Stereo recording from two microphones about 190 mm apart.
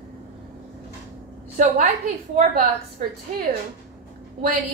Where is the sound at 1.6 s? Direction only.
40° right (ahead or behind).